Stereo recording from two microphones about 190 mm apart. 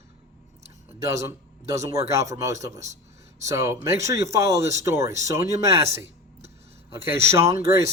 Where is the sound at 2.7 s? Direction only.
35° right (ahead or behind).